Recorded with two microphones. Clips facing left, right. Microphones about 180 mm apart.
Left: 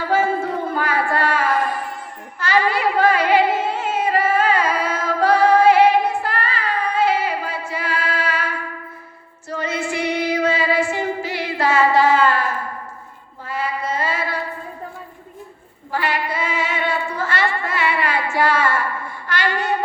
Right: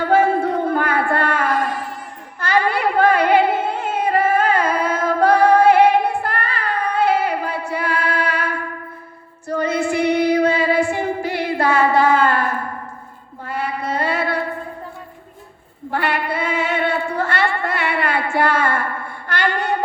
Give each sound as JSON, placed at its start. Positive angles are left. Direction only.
{"t": 0.0, "sound": "a sound", "side_deg": -60}
{"t": 2.4, "sound": "music", "side_deg": -55}
{"t": 9.5, "sound": "female singing", "side_deg": -55}
{"t": 15.9, "sound": "female singing", "side_deg": -60}